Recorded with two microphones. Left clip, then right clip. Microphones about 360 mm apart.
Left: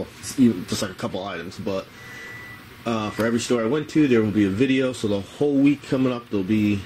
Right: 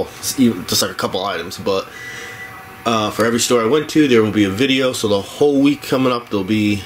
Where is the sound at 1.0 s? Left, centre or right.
Centre.